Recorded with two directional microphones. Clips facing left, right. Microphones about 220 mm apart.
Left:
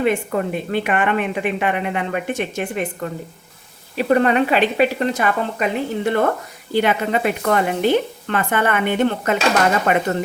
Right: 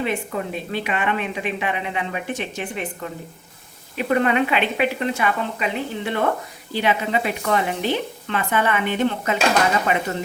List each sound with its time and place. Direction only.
0.0 s speech: 55° left (ahead or behind)
3.9 s speech: 40° left (ahead or behind); by 10.0 s 55° left (ahead or behind)